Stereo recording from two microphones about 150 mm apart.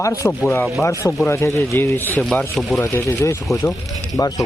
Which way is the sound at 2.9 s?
20° left (ahead or behind).